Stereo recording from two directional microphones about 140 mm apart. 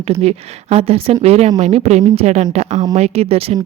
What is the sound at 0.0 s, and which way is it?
Speech, 45° right (ahead or behind).